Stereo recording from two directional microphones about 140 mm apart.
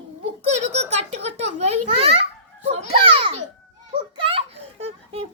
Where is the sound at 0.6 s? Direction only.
50° right (ahead or behind).